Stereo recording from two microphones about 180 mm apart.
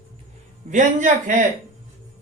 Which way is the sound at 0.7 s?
45° right (ahead or behind).